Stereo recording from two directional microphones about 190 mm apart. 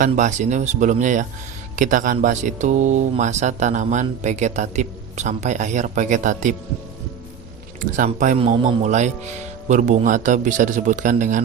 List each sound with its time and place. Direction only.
0.0 s speech: 40° right (ahead or behind)
7.8 s speech: 45° right (ahead or behind)
8.4 s speech: 30° right (ahead or behind)